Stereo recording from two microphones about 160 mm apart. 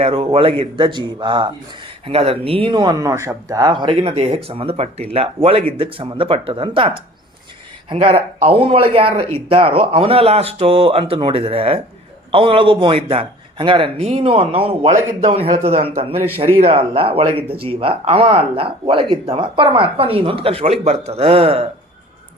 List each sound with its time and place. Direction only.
0.0 s speech: 35° right (ahead or behind)